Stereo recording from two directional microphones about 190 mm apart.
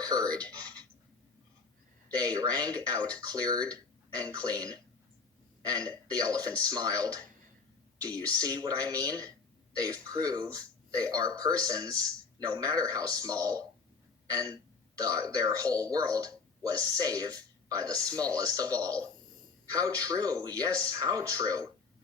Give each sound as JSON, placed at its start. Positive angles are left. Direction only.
{"t": 0.0, "sound": "speech", "side_deg": -20}
{"t": 2.1, "sound": "speech", "side_deg": -20}
{"t": 8.3, "sound": "speech", "side_deg": -20}